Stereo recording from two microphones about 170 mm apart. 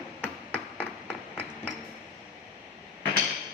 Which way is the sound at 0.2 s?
10° left (ahead or behind).